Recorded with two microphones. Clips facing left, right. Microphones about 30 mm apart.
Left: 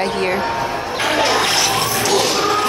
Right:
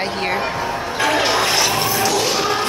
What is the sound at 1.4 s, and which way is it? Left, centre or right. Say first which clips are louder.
Music: even; centre.